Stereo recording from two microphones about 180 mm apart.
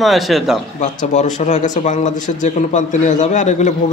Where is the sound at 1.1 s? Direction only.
40° left (ahead or behind).